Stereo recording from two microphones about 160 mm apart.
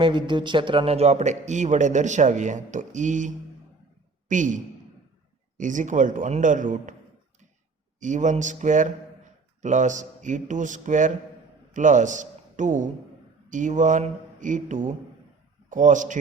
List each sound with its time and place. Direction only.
0.0 s speech: 30° right (ahead or behind); by 6.9 s 55° right (ahead or behind)
7.9 s a man's voice: 50° right (ahead or behind)